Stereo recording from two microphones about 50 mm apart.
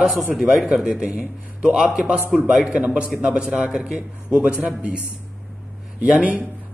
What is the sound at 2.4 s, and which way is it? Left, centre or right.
Speech, centre.